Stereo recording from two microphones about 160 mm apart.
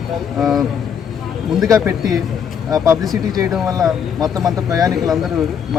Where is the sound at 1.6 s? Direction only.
20° right (ahead or behind).